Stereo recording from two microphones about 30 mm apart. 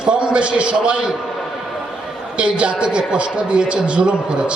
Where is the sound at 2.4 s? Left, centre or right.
Right.